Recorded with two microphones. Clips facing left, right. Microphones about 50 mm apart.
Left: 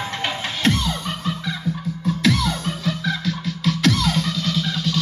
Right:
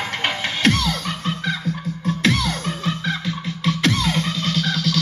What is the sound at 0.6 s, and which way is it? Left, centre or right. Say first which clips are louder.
Music: right 2 dB; right.